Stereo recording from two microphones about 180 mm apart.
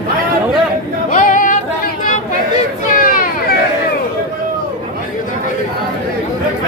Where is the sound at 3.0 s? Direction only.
50° left (ahead or behind).